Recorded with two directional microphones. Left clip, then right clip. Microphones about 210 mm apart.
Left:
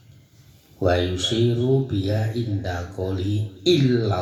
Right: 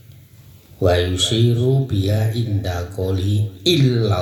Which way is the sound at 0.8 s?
50° right (ahead or behind).